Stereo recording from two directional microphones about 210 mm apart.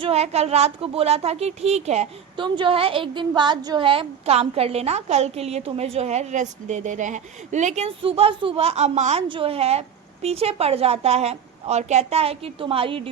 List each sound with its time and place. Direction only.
0.0 s speech: 30° right (ahead or behind)